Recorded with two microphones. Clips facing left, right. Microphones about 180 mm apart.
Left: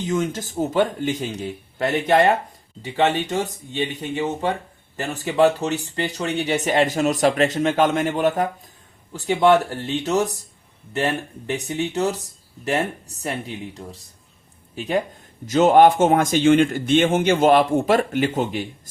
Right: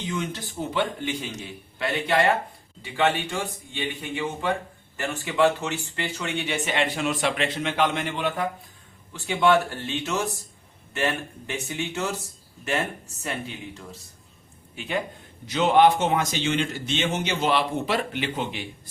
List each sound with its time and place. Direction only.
0.0 s a man's voice: 45° left (ahead or behind)
14.8 s a man's voice: 40° left (ahead or behind)